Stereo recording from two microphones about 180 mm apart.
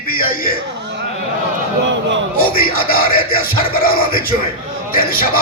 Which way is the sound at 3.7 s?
55° left (ahead or behind).